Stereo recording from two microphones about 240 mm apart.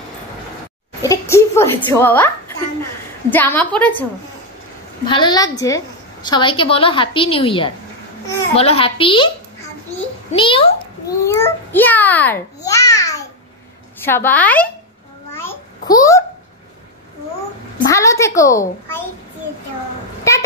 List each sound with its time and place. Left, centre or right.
1.0 s a woman's voice: centre
5.0 s a child's voice: centre
10.3 s a child's voice: left
15.3 s babbling: centre
17.8 s a child's voice: centre